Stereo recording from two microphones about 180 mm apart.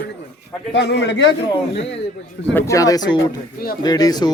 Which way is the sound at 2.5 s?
20° left (ahead or behind).